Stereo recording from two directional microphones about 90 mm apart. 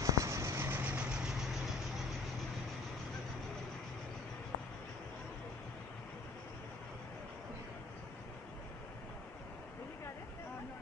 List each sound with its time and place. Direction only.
0.0 s vehicle: 35° right (ahead or behind)
0.8 s vehicle: 10° right (ahead or behind)